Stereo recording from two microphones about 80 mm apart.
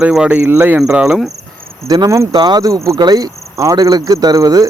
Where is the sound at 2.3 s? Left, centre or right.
Right.